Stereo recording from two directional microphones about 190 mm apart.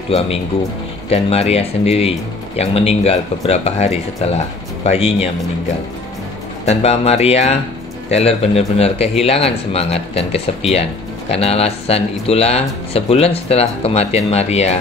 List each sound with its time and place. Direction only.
1.1 s a man's voice: 35° left (ahead or behind)
6.6 s a man's voice: 35° left (ahead or behind)